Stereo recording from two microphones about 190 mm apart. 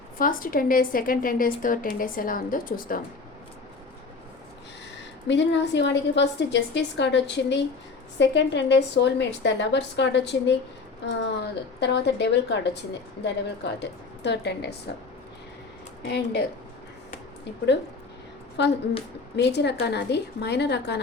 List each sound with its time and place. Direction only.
0.2 s a woman's voice: 45° left (ahead or behind)
5.3 s a woman's voice: 70° left (ahead or behind)
16.0 s a woman's voice: 60° left (ahead or behind)
18.6 s a woman's voice: 65° left (ahead or behind)